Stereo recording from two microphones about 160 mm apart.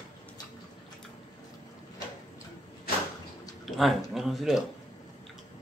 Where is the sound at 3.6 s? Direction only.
Centre (ahead or behind).